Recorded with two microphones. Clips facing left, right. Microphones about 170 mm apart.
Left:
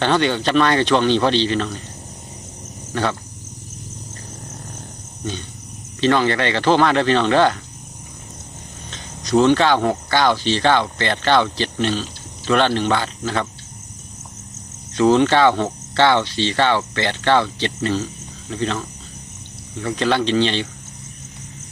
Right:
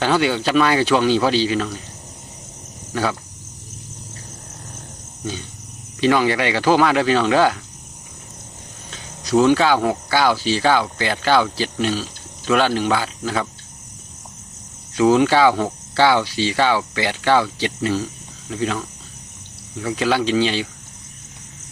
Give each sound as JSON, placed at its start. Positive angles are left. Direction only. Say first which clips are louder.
{"t": 0.0, "sound": "cricket", "louder": "even", "side_deg": -5}
{"t": 2.9, "sound": "speech", "louder": "even", "side_deg": -5}
{"t": 6.0, "sound": "cricket", "louder": "even", "side_deg": -10}
{"t": 8.9, "sound": "speech", "louder": "even", "side_deg": -5}
{"t": 14.9, "sound": "cricket", "louder": "even", "side_deg": -5}